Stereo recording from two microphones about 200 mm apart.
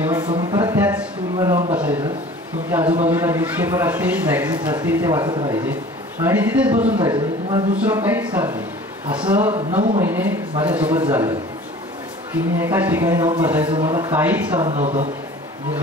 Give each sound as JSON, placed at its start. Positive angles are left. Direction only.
{"t": 0.0, "sound": "a sound", "side_deg": -15}
{"t": 3.1, "sound": "a man's voice", "side_deg": -10}
{"t": 6.2, "sound": "a man's voice", "side_deg": -10}
{"t": 7.0, "sound": "speech", "side_deg": -20}
{"t": 7.7, "sound": "a man's voice", "side_deg": -10}
{"t": 9.5, "sound": "speech", "side_deg": -35}
{"t": 9.9, "sound": "a man's voice", "side_deg": -10}
{"t": 12.5, "sound": "a man's voice", "side_deg": -10}
{"t": 14.7, "sound": "speech", "side_deg": -35}